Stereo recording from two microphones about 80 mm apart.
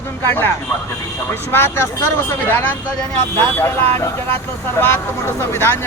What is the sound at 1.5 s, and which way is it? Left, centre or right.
Speech, left.